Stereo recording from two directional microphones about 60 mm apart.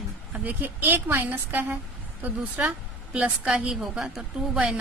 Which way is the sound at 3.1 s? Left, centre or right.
Centre.